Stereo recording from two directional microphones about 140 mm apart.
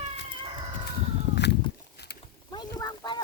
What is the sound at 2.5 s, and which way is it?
Speech, 30° left (ahead or behind).